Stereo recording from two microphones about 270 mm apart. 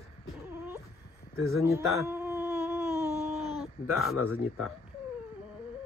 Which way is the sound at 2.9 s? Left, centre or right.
Centre.